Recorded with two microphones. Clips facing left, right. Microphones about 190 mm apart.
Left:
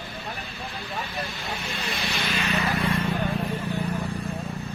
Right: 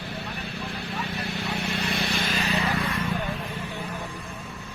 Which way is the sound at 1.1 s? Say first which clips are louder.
Right 2 dB; 65° right (ahead or behind).